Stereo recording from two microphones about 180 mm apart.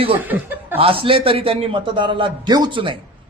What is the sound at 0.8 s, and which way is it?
A man's voice, 30° right (ahead or behind).